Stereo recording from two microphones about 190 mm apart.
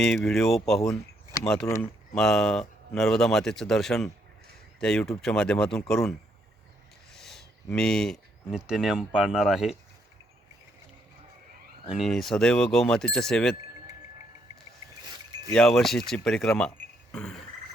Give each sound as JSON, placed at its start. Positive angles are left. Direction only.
{"t": 0.3, "sound": "speech", "side_deg": 0}
{"t": 1.6, "sound": "speech", "side_deg": 15}
{"t": 2.1, "sound": "speech", "side_deg": 5}
{"t": 11.9, "sound": "speech", "side_deg": 0}
{"t": 15.5, "sound": "speech", "side_deg": 0}
{"t": 17.1, "sound": "frog", "side_deg": 5}